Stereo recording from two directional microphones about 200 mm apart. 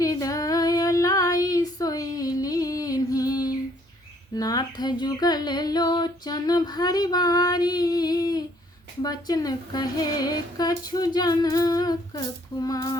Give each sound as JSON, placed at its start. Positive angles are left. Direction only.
{"t": 0.0, "sound": "female singing", "side_deg": 15}